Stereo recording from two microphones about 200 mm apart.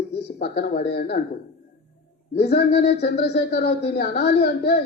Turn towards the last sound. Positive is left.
turn(degrees=55)  # may be behind; listen again after turning